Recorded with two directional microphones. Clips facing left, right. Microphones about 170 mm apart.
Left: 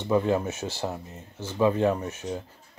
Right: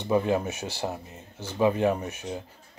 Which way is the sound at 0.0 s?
15° right (ahead or behind).